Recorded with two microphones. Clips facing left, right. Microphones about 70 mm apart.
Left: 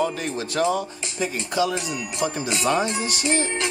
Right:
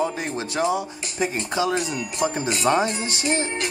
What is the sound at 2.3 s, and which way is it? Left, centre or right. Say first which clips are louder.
Speech: right 2 dB; right.